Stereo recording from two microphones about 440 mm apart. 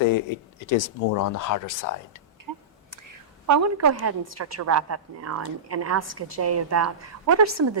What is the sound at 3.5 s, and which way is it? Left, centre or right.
A woman's voice, right.